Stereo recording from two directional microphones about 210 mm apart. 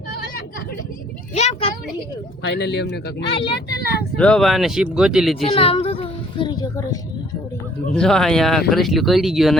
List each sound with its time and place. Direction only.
1.3 s speech: 30° left (ahead or behind)
2.4 s speech: 55° left (ahead or behind)
4.2 s speech: 5° left (ahead or behind)
5.5 s a child's voice: 25° left (ahead or behind)
7.9 s speech: centre (ahead or behind)